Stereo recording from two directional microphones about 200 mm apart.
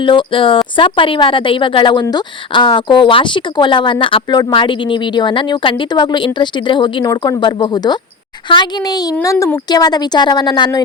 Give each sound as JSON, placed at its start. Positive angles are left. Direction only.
{"t": 0.0, "sound": "speech", "side_deg": 25}